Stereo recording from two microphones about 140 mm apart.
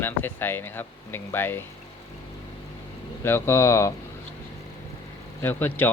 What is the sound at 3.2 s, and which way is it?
Speech, 15° left (ahead or behind).